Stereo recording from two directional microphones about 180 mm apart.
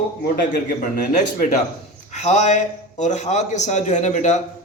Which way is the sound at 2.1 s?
40° left (ahead or behind).